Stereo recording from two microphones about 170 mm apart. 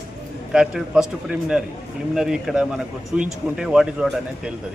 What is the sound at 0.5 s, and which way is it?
A man's voice, 5° right (ahead or behind).